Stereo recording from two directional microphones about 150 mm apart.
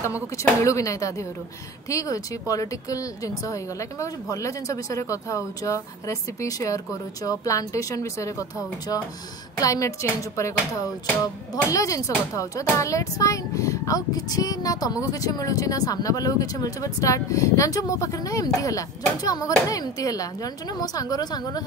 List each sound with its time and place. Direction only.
0.0 s speech: 20° left (ahead or behind)